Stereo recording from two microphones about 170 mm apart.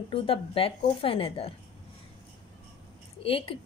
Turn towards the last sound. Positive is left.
turn(degrees=30)  # may be behind; listen again after turning